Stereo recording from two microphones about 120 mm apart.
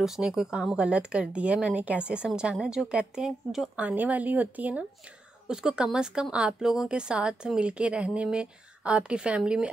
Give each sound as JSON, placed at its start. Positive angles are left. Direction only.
{"t": 0.0, "sound": "speech", "side_deg": -5}